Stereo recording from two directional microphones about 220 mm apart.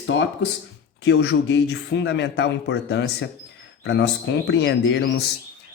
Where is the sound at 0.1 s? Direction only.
55° left (ahead or behind).